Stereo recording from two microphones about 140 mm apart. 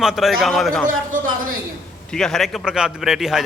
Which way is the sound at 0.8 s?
80° right.